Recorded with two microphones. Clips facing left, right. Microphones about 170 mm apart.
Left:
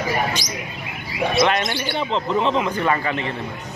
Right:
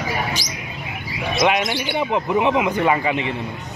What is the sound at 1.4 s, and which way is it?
A man's voice, 10° right (ahead or behind).